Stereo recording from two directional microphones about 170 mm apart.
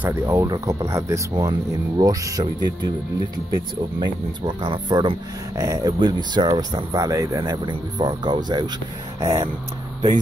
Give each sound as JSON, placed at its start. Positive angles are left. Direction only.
{"t": 0.0, "sound": "speech", "side_deg": -15}